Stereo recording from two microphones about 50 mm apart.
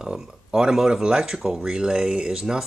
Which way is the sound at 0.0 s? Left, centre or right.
Centre.